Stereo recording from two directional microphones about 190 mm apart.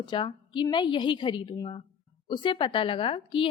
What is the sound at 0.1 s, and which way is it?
A woman's voice, 25° left (ahead or behind).